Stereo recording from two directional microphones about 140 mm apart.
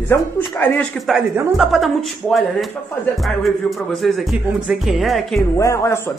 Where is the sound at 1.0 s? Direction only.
Centre (ahead or behind).